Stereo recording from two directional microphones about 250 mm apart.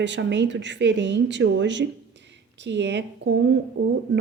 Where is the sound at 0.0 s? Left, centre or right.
Right.